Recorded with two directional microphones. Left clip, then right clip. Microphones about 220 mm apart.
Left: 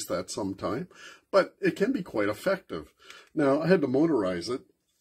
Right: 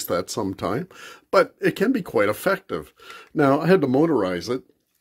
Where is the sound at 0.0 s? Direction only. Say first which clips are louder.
Right 7 dB; 45° right (ahead or behind).